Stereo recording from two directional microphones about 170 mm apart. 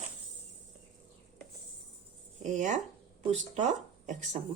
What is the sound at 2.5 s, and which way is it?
Speech, 45° right (ahead or behind).